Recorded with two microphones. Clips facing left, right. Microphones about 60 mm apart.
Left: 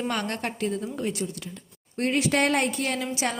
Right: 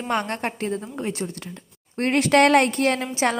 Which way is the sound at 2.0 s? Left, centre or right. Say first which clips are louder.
Right 6 dB; right.